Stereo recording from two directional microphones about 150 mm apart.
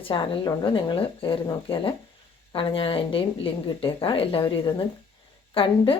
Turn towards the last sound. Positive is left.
turn(degrees=35)  # may be behind; listen again after turning